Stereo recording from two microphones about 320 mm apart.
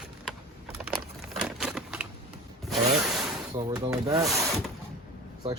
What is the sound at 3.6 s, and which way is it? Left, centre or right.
Speech, centre.